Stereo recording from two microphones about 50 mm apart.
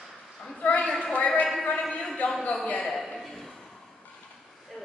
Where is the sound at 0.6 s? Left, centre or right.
Left.